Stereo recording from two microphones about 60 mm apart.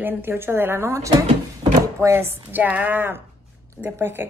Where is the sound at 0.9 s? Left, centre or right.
Right.